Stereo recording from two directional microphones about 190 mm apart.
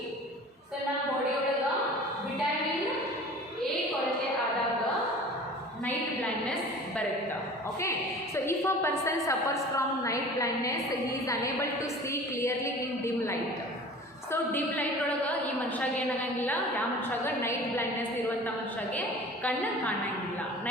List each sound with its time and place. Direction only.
8.4 s a woman's voice: 15° left (ahead or behind)
12.1 s a sound: 15° left (ahead or behind)
17.2 s a woman's voice: 10° left (ahead or behind)